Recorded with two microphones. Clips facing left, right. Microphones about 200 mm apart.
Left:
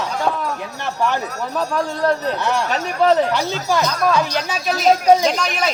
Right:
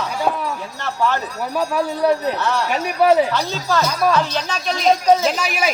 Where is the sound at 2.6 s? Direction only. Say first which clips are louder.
Right 2 dB; 10° right (ahead or behind).